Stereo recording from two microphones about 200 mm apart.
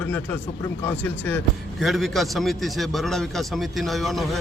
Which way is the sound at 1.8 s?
Centre (ahead or behind).